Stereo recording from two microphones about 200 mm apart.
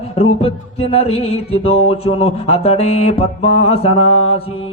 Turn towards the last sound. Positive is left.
turn(degrees=30)  # may be behind; listen again after turning